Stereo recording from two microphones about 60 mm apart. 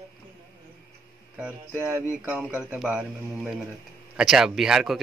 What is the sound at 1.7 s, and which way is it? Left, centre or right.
Speech, right.